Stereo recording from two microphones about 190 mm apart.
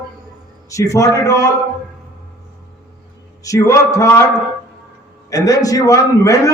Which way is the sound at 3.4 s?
15° left (ahead or behind).